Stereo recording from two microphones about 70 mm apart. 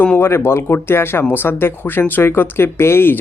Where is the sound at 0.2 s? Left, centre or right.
Left.